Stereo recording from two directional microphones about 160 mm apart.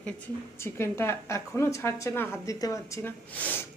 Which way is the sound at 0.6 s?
15° left (ahead or behind).